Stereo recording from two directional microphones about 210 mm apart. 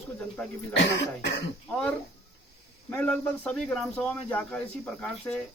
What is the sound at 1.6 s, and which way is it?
Speech, 5° left (ahead or behind).